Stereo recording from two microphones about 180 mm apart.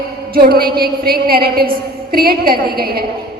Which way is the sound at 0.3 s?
55° right (ahead or behind).